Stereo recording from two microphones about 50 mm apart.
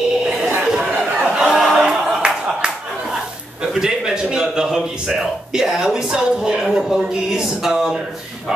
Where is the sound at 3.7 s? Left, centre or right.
Centre.